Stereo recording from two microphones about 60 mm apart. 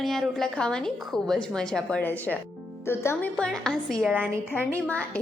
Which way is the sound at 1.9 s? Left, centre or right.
Left.